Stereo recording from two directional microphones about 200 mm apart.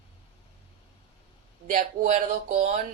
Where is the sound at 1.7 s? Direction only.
40° right (ahead or behind).